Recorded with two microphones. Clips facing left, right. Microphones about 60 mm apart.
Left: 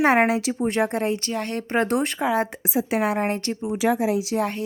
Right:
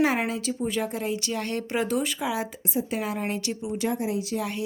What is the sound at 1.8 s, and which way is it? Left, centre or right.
Speech, left.